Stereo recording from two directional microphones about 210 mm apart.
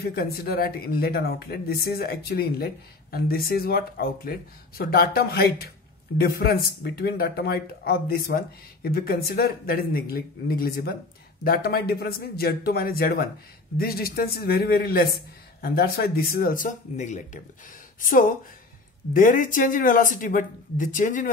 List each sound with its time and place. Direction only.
0.0 s speech: 45° left (ahead or behind)
19.1 s speech: 40° left (ahead or behind)